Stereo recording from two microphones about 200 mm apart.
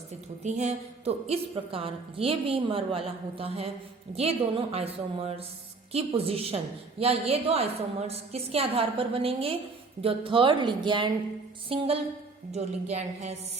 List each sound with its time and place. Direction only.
0.4 s a woman's voice: 35° right (ahead or behind)